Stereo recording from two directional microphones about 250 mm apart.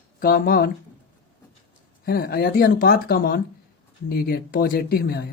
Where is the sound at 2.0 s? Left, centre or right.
Left.